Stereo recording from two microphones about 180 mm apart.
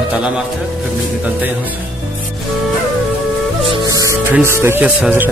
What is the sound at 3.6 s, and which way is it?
Music, 25° right (ahead or behind).